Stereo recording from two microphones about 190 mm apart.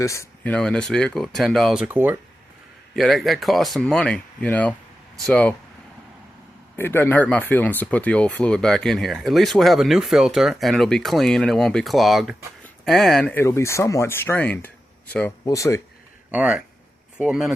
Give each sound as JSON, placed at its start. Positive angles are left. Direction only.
{"t": 0.0, "sound": "speech", "side_deg": 15}
{"t": 2.9, "sound": "speech", "side_deg": 0}
{"t": 6.7, "sound": "speech", "side_deg": 10}
{"t": 16.3, "sound": "speech", "side_deg": -5}